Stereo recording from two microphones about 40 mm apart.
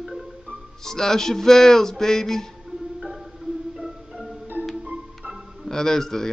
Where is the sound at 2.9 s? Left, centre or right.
Centre.